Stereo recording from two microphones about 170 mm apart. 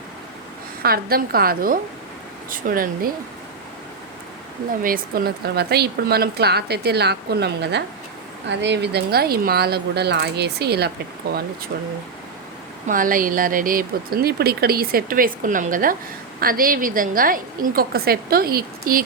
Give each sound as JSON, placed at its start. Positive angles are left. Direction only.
{"t": 0.8, "sound": "speech", "side_deg": -60}
{"t": 4.8, "sound": "speech", "side_deg": -55}
{"t": 12.9, "sound": "speech", "side_deg": -55}